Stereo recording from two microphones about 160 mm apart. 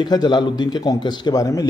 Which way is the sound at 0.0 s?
25° left (ahead or behind).